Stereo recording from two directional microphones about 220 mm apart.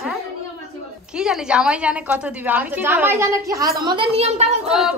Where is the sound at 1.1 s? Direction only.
5° right (ahead or behind).